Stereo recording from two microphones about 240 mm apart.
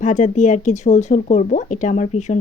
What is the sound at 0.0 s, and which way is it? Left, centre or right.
A woman's voice, left.